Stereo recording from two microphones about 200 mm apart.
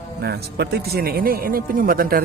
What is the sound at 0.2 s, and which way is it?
Speech, 55° right (ahead or behind).